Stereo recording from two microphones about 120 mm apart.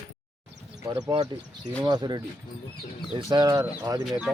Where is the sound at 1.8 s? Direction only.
35° right (ahead or behind).